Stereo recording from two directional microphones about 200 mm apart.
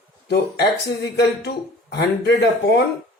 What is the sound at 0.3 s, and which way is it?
A man's voice, 55° left (ahead or behind).